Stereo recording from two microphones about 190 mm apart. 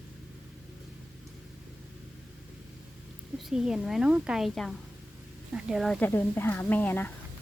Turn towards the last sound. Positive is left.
turn(degrees=10)  # may be behind; listen again after turning